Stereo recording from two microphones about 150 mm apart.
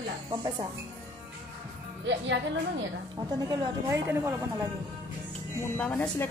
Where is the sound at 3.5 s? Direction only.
25° right (ahead or behind).